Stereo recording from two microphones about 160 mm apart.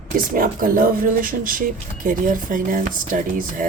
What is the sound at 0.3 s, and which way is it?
Speech, 60° right (ahead or behind).